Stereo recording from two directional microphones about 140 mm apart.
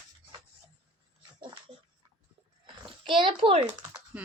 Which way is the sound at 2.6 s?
35° right (ahead or behind).